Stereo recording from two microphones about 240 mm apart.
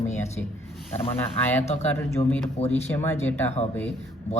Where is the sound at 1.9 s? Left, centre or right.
Centre.